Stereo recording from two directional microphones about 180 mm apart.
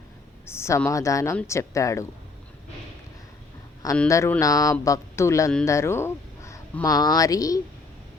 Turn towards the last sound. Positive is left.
turn(degrees=20)  # may be behind; listen again after turning